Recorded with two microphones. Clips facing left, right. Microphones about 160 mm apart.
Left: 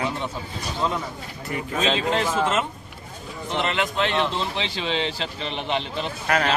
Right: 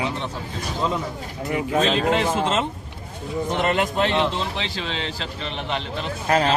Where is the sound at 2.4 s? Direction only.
25° right (ahead or behind).